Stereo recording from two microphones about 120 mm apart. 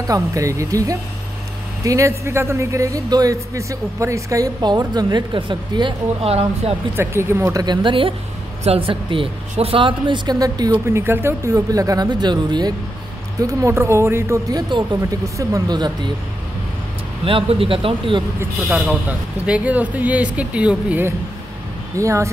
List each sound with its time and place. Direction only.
0.1 s speech: 25° right (ahead or behind)
6.2 s speech: 60° right (ahead or behind)
7.0 s speech: 20° right (ahead or behind)
7.6 s speech: 40° right (ahead or behind); by 14.4 s 20° right (ahead or behind)
14.5 s speech: 35° right (ahead or behind)
17.2 s speech: 50° right (ahead or behind)
18.6 s speech: centre (ahead or behind)
19.0 s speech: 10° right (ahead or behind)
21.9 s speech: 25° right (ahead or behind)